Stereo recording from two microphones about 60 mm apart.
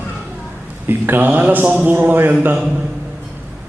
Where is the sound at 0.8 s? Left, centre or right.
Right.